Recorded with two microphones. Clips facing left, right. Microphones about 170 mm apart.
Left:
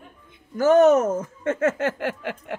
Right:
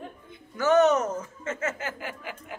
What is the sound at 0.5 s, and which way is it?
Speech, 45° left (ahead or behind).